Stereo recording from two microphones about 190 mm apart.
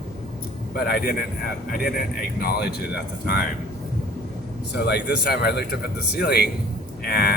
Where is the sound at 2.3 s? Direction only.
55° left (ahead or behind).